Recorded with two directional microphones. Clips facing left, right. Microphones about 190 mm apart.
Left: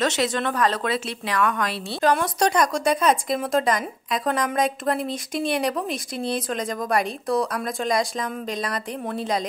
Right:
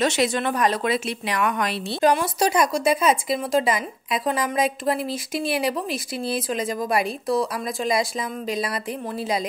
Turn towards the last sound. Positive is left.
turn(degrees=-5)  # may be behind; listen again after turning